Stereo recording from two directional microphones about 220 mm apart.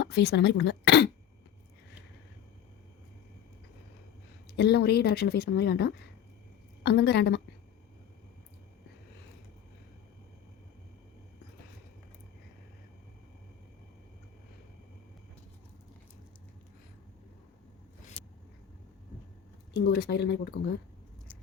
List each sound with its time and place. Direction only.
0.0 s speech: 50° left (ahead or behind)
4.5 s speech: 50° left (ahead or behind)
18.2 s a sound: 25° left (ahead or behind)
19.8 s speech: 50° left (ahead or behind)